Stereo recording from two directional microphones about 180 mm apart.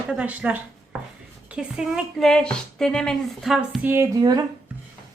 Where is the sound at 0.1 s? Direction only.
5° right (ahead or behind).